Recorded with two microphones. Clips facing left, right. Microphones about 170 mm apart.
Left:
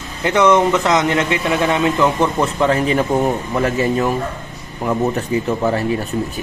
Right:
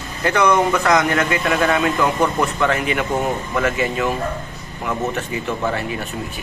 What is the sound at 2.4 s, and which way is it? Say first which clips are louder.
Speech: left 3 dB; 30° left (ahead or behind).